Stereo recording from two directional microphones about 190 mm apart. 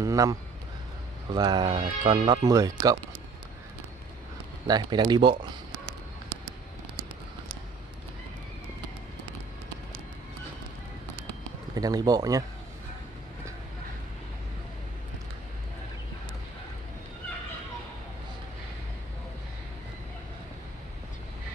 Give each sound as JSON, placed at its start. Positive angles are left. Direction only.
{"t": 0.0, "sound": "a man's voice", "side_deg": -20}
{"t": 4.6, "sound": "speech", "side_deg": -20}
{"t": 11.7, "sound": "speech", "side_deg": -20}